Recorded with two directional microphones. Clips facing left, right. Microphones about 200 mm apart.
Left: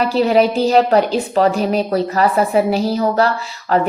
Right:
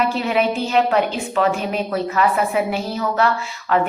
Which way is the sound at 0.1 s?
35° left (ahead or behind).